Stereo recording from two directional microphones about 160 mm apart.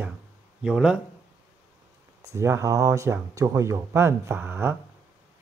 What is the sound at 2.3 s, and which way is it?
Speech, 20° right (ahead or behind).